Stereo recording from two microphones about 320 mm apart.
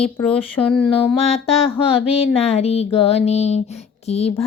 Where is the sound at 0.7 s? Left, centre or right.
Centre.